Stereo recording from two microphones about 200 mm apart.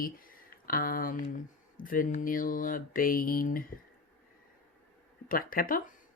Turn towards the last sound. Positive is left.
turn(degrees=45)  # may be behind; listen again after turning